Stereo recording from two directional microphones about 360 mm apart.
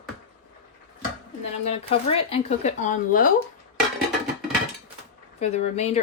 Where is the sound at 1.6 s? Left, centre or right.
Centre.